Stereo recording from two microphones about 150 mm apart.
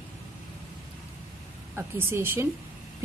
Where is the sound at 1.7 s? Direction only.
15° right (ahead or behind).